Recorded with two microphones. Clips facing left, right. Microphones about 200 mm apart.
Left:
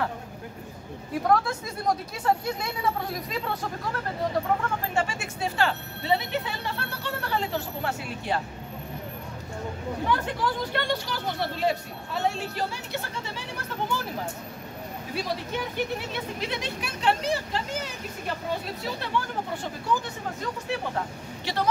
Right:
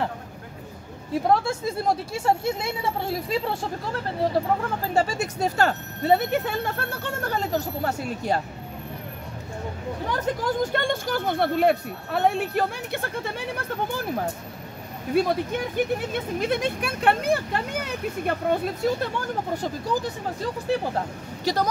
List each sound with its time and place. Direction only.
1.2 s speech: 25° right (ahead or behind)
10.0 s speech: 45° right (ahead or behind)
15.1 s speech: 50° right (ahead or behind)